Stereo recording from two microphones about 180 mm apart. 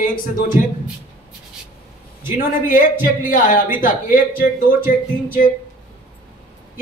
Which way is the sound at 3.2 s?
50° left (ahead or behind).